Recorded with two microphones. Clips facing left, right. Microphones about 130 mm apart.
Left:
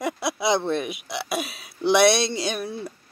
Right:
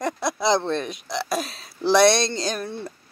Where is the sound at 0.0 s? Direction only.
5° left (ahead or behind).